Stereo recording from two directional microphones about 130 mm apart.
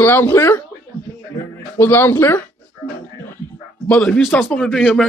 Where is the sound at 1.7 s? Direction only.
15° left (ahead or behind).